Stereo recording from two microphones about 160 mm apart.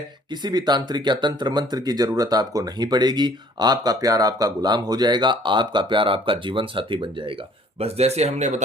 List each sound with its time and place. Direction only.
0.3 s speech: 25° right (ahead or behind); by 8.6 s 45° right (ahead or behind)